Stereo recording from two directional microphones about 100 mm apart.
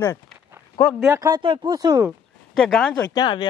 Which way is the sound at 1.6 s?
40° right (ahead or behind).